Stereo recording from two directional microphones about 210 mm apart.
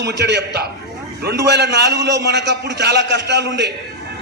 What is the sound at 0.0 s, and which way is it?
A man's voice, 55° right (ahead or behind).